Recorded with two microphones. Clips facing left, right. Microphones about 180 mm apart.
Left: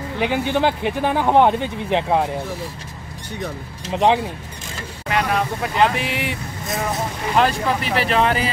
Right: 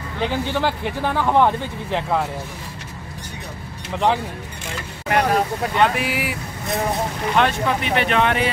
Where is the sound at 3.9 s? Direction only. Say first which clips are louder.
Left 3 dB; 20° left (ahead or behind).